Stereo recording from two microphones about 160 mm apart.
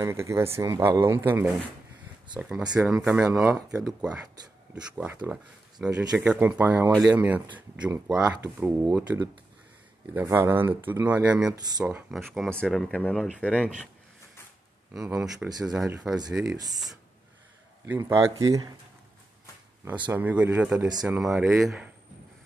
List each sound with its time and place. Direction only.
0.0 s speech: 15° right (ahead or behind)
2.7 s speech: 5° right (ahead or behind)
3.6 s speech: 20° right (ahead or behind)
4.9 s speech: 10° right (ahead or behind)
9.1 s speech: 25° right (ahead or behind)
10.1 s speech: 15° right (ahead or behind)
12.4 s speech: 5° left (ahead or behind)
15.0 s speech: 5° right (ahead or behind)
16.4 s speech: 25° right (ahead or behind)
17.8 s speech: 15° right (ahead or behind)
20.1 s speech: 10° right (ahead or behind)